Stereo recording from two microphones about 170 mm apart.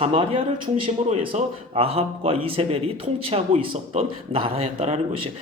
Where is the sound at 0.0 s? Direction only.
35° right (ahead or behind).